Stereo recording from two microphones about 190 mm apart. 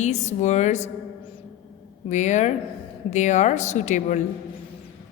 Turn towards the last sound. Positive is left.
turn(degrees=40)  # may be behind; listen again after turning